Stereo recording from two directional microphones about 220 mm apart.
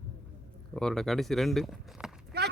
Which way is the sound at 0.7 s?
Centre (ahead or behind).